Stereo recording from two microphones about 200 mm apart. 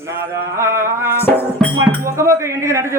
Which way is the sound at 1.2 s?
10° left (ahead or behind).